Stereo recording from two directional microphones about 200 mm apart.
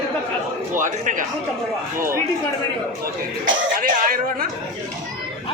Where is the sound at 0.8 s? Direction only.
40° right (ahead or behind).